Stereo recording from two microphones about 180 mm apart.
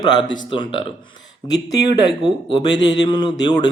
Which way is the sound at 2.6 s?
25° left (ahead or behind).